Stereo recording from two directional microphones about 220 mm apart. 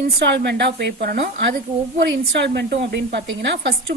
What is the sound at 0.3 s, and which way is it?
A woman's voice, 50° right (ahead or behind).